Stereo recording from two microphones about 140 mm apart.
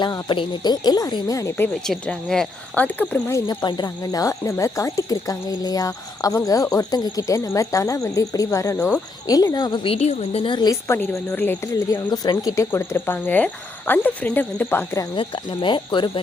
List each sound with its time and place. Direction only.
0.0 s speech: 35° left (ahead or behind); by 1.7 s 20° left (ahead or behind)
1.9 s speech: 5° left (ahead or behind)
3.4 s a woman's voice: 30° left (ahead or behind)
10.7 s speech: 15° left (ahead or behind)
12.7 s speech: 15° left (ahead or behind)
15.1 s a woman's voice: 35° left (ahead or behind)